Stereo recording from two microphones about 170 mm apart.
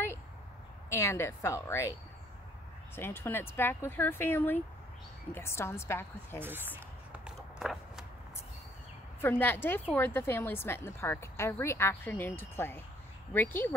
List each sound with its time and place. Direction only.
0.8 s a woman's voice: 15° left (ahead or behind)
3.0 s a woman's voice: 15° left (ahead or behind)
7.1 s walk: 5° right (ahead or behind)
9.2 s a woman's voice: 10° left (ahead or behind)